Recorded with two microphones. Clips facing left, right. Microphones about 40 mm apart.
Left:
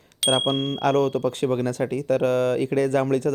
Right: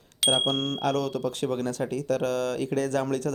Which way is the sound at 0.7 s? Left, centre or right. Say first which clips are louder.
Left 6 dB; left.